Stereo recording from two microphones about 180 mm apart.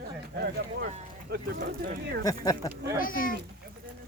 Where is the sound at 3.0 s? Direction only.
50° left (ahead or behind).